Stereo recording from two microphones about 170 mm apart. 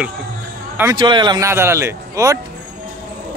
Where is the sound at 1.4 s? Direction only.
15° right (ahead or behind).